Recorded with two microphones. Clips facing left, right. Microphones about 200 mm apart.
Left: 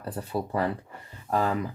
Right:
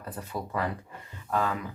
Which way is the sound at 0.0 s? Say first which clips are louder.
Left 5 dB; 30° left (ahead or behind).